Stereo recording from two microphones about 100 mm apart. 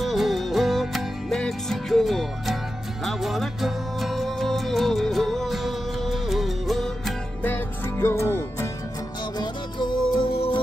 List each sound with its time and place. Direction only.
0.0 s music: centre (ahead or behind)
7.4 s music: 20° left (ahead or behind)
9.4 s music: 50° left (ahead or behind)
10.3 s music: 75° left (ahead or behind)